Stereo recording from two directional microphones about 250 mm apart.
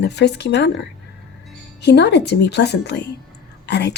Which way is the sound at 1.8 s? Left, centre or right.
Left.